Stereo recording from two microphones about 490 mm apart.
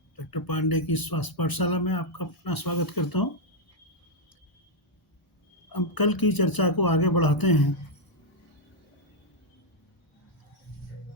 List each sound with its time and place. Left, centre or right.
0.2 s speech: left
5.6 s speech: left